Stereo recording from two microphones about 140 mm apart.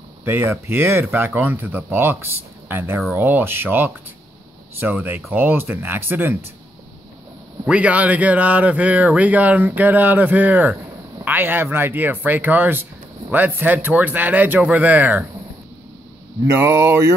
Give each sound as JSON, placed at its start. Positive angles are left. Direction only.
{"t": 0.2, "sound": "speech", "side_deg": -15}
{"t": 7.6, "sound": "speech", "side_deg": -10}
{"t": 16.5, "sound": "speech", "side_deg": -20}